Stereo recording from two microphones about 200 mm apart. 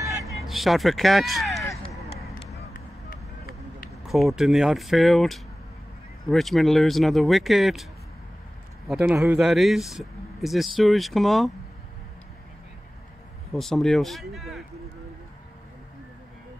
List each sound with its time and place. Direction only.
0.0 s vehicle: 15° right (ahead or behind)
0.5 s a man's voice: centre (ahead or behind)
2.5 s vehicle: 45° left (ahead or behind)
4.1 s a man's voice: centre (ahead or behind)
8.8 s a man's voice: centre (ahead or behind)
13.5 s a man's voice: centre (ahead or behind)